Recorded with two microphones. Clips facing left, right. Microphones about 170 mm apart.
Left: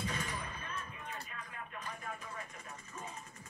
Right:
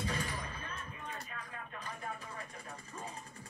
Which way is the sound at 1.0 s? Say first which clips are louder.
Right 1 dB; 35° right (ahead or behind).